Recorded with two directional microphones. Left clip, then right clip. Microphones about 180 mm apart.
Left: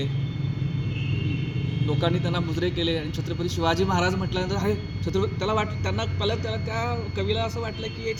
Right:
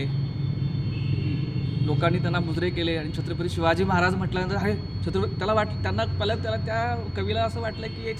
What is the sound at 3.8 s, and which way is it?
A man's voice, 10° right (ahead or behind).